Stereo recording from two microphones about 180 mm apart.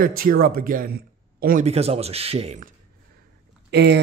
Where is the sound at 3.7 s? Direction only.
70° right (ahead or behind).